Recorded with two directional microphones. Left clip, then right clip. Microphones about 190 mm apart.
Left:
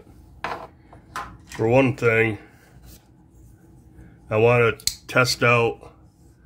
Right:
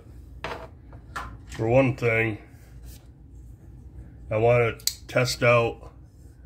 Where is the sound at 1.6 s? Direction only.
20° left (ahead or behind).